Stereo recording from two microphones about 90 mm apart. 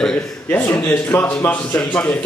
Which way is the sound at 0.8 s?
20° left (ahead or behind).